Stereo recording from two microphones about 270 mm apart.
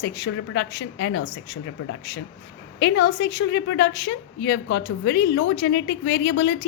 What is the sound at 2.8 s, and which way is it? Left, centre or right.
A woman's voice, left.